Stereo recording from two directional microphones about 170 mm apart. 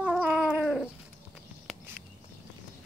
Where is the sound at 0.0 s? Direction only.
5° right (ahead or behind).